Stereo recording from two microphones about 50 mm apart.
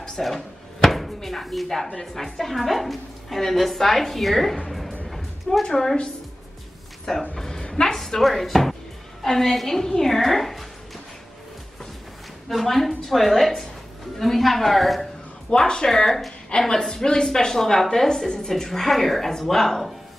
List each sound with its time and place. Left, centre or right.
0.0 s a woman's voice: centre
4.6 s music: centre
5.1 s a sound: centre
5.7 s a woman's voice: centre
7.3 s a sound: centre
7.9 s a woman's voice: centre
12.4 s a woman's voice: centre
15.5 s a woman's voice: centre